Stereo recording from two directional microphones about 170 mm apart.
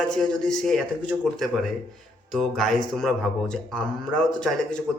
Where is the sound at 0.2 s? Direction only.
5° left (ahead or behind).